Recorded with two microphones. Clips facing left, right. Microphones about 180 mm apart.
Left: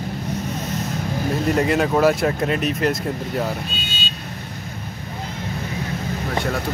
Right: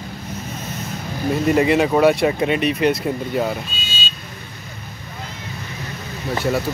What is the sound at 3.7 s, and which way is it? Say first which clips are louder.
Vehicle: left 1 dB; 60° left (ahead or behind).